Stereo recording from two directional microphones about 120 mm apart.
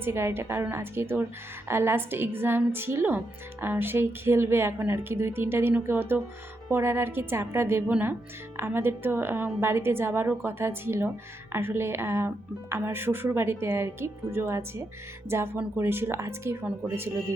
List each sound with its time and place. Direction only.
0.0 s a woman's voice: 20° right (ahead or behind)